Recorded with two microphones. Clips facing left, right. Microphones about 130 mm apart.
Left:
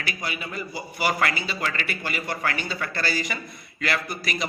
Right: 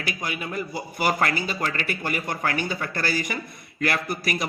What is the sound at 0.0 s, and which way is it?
A man's voice, 50° right (ahead or behind).